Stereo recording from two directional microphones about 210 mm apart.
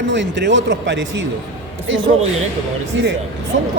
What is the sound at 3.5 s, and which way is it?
Speech, 55° right (ahead or behind).